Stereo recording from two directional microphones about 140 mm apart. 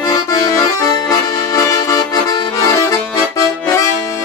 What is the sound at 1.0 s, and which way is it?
Accordion, 20° left (ahead or behind).